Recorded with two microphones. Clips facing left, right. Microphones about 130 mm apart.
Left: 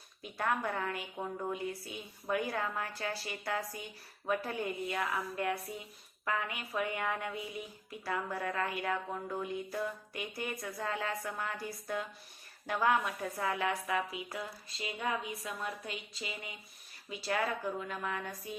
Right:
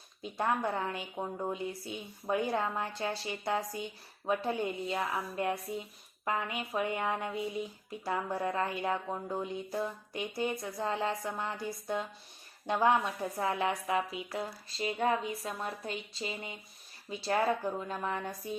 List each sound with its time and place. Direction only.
0.2 s a woman's voice: 25° right (ahead or behind)
14.3 s a woman's voice: 35° right (ahead or behind)